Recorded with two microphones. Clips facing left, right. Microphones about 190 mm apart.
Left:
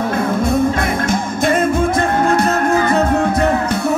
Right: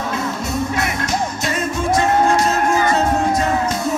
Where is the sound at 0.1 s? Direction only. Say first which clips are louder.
Left 7 dB; 55° left (ahead or behind).